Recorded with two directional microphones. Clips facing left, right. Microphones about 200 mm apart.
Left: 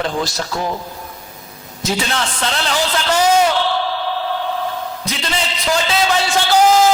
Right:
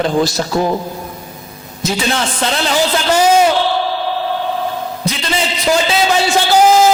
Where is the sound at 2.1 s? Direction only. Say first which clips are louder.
Right 4 dB; 10° right (ahead or behind).